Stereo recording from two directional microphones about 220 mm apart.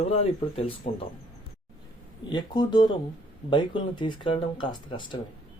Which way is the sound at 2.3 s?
20° left (ahead or behind).